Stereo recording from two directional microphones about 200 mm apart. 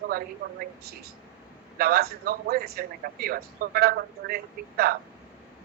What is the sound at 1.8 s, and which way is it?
A man's voice, 50° right (ahead or behind).